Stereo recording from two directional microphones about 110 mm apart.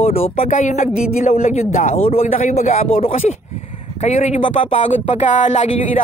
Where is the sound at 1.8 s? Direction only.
80° left.